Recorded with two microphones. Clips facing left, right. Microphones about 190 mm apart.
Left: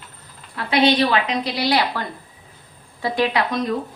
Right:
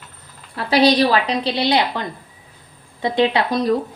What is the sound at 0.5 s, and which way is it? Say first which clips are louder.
A woman's voice: right 2 dB; 35° right (ahead or behind).